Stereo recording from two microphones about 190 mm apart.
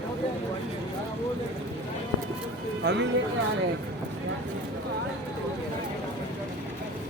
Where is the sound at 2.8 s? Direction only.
65° right (ahead or behind).